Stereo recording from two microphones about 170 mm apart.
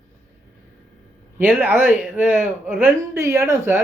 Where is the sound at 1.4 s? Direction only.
10° right (ahead or behind).